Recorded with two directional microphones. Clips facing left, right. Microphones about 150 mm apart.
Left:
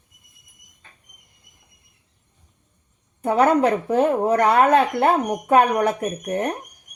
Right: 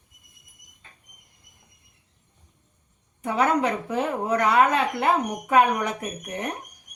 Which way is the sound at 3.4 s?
55° left (ahead or behind).